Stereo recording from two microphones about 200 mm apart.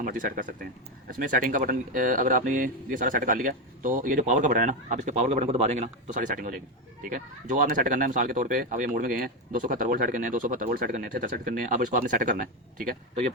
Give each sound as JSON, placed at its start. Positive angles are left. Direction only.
{"t": 0.0, "sound": "speech", "side_deg": -45}